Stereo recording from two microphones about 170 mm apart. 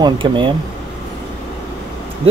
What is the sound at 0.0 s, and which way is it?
Speech, 30° right (ahead or behind).